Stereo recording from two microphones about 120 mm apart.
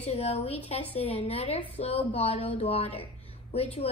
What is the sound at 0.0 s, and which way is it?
A woman's voice, 55° left (ahead or behind).